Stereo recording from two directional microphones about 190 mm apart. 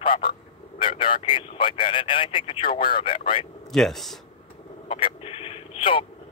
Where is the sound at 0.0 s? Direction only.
25° left (ahead or behind).